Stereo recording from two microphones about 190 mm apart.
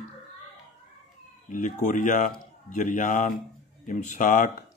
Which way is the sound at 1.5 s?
40° left (ahead or behind).